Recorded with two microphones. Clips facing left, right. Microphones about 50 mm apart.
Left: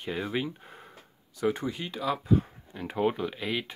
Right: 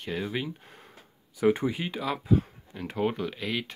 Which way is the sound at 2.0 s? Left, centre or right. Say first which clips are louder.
Left 1 dB; centre.